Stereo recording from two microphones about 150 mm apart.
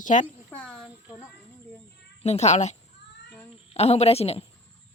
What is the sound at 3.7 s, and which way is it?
Speech, 45° left (ahead or behind).